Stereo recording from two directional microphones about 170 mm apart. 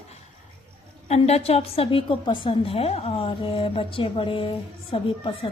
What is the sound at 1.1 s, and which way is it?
A woman's voice, 40° left (ahead or behind).